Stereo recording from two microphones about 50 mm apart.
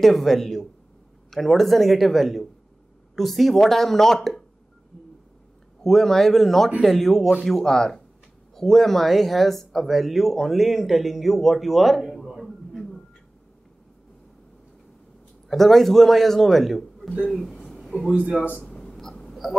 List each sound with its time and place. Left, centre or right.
0.0 s speech: centre
5.9 s speech: centre
15.4 s speech: centre
17.3 s a sound: centre
17.8 s a man's voice: centre
18.6 s a sound: centre